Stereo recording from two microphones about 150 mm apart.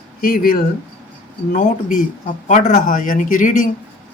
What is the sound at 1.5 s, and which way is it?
Speech, 60° left (ahead or behind).